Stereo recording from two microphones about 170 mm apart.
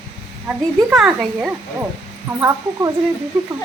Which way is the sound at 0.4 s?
5° right (ahead or behind).